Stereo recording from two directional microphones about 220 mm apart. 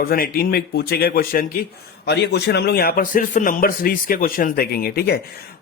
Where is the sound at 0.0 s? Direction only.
40° left (ahead or behind).